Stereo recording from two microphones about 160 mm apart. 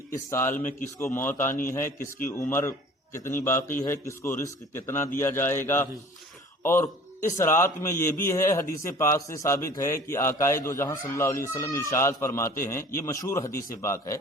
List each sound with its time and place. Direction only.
0.3 s a man's voice: 15° left (ahead or behind)